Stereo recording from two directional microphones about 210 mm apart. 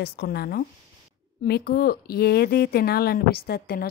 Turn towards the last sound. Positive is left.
turn(degrees=45)  # may be behind; listen again after turning